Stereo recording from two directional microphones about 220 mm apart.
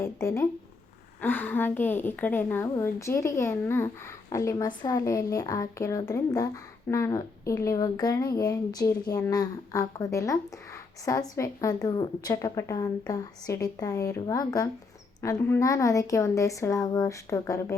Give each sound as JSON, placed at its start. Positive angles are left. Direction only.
{"t": 0.0, "sound": "a woman's voice", "side_deg": 15}